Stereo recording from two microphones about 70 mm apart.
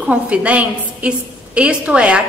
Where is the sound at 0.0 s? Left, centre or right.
Centre.